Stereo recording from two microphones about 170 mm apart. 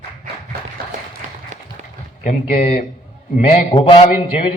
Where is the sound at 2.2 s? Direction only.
45° left (ahead or behind).